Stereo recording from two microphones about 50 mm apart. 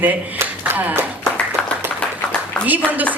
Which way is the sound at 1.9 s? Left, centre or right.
Left.